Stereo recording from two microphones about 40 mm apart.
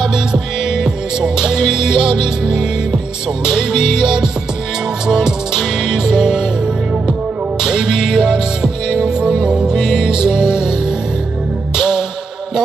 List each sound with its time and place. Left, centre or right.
0.0 s music: centre
7.6 s music: centre